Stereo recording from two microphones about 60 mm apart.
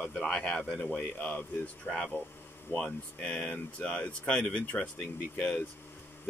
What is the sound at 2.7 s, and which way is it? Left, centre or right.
Speech, left.